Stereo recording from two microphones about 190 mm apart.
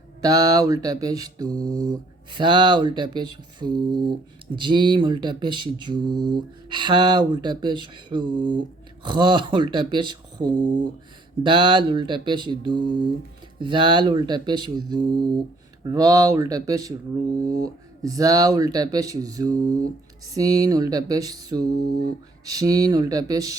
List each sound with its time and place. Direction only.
0.2 s speech: 20° right (ahead or behind)